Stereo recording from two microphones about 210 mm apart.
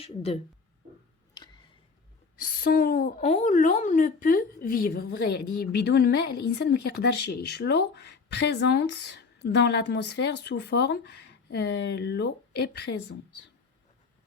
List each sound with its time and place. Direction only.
0.0 s speech: 30° left (ahead or behind)
1.4 s a sound: 20° left (ahead or behind)
2.4 s a woman's voice: 45° left (ahead or behind)